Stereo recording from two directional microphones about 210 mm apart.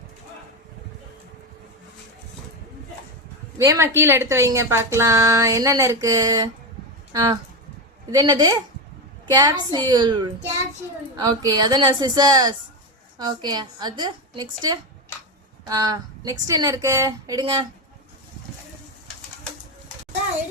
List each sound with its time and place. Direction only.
3.6 s a woman's voice: 15° right (ahead or behind)
8.1 s a woman's voice: 20° right (ahead or behind)